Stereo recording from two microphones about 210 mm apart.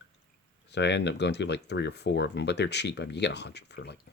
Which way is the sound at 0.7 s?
55° left (ahead or behind).